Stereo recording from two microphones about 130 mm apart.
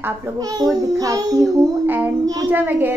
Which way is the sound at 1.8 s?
15° right (ahead or behind).